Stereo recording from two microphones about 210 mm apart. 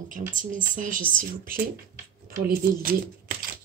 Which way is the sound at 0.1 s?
35° right (ahead or behind).